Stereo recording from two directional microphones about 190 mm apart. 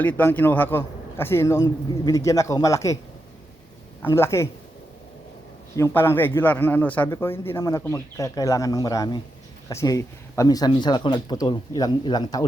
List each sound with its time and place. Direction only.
0.0 s a man's voice: 10° left (ahead or behind)
4.0 s a man's voice: 15° left (ahead or behind)
5.7 s a man's voice: 15° left (ahead or behind)